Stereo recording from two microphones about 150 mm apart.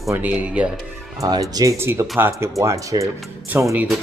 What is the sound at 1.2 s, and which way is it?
Speech, 25° right (ahead or behind).